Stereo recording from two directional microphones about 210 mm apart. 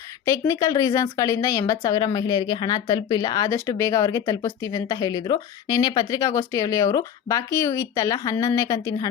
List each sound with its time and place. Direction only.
0.3 s a woman's voice: 15° left (ahead or behind)